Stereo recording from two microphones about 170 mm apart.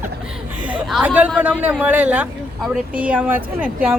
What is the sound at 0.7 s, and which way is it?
Speech, 10° right (ahead or behind).